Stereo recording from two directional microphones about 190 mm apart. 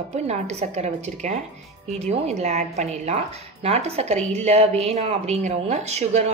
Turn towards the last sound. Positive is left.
turn(degrees=-35)  # may be behind; listen again after turning